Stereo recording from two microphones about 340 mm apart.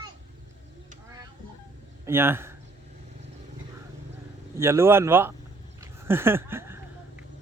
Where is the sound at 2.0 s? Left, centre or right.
Centre.